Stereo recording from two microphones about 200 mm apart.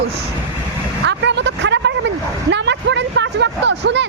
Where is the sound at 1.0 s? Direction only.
65° right (ahead or behind).